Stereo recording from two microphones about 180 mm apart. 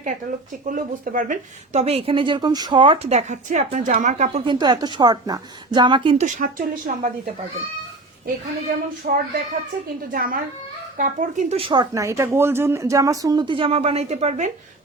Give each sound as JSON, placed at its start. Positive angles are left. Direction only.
{"t": 0.7, "sound": "speech", "side_deg": -50}
{"t": 4.4, "sound": "speech", "side_deg": -25}
{"t": 6.2, "sound": "a woman's voice", "side_deg": -45}
{"t": 8.7, "sound": "a woman's voice", "side_deg": -60}